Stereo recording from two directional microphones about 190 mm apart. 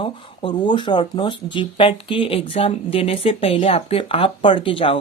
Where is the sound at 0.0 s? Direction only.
25° left (ahead or behind).